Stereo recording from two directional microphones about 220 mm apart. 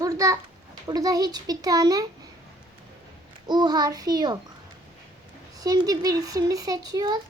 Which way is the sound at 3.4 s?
20° right (ahead or behind).